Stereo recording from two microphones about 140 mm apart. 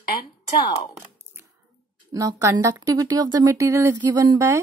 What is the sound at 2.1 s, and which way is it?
Speech, 25° right (ahead or behind).